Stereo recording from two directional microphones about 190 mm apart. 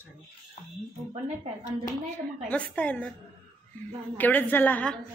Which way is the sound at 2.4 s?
10° left (ahead or behind).